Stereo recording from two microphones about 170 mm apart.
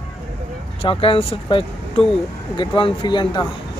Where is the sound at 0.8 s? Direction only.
30° left (ahead or behind).